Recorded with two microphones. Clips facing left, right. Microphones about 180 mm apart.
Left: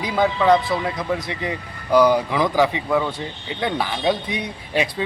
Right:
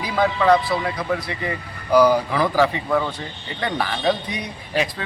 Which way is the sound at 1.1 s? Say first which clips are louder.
Even; 15° left (ahead or behind).